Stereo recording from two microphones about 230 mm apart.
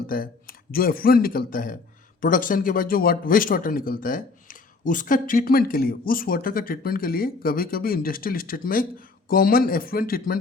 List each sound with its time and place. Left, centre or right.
0.1 s a man's voice: left